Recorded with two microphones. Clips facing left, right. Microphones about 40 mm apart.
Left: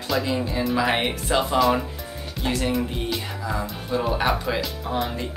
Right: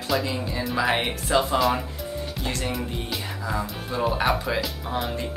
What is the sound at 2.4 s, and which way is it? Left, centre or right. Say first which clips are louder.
Speech: left 6 dB; centre.